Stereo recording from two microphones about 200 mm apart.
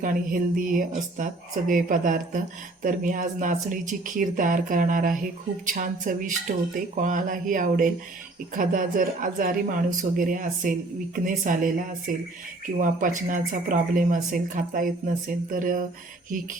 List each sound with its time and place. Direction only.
0.0 s speech: 45° right (ahead or behind)